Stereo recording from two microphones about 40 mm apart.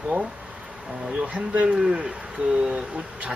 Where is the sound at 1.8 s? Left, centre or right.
Centre.